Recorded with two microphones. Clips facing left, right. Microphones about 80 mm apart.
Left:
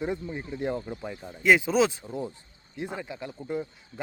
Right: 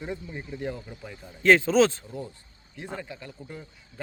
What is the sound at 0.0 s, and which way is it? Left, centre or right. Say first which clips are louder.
Speech: left 4 dB; centre.